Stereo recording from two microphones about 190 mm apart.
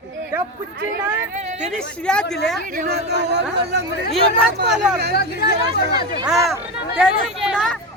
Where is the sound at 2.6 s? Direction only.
45° right (ahead or behind); by 3.8 s 60° right (ahead or behind).